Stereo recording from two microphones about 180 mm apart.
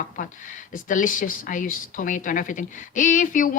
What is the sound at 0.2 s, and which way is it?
Speech, 45° left (ahead or behind).